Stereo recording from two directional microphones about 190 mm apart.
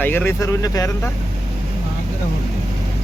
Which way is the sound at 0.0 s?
10° left (ahead or behind).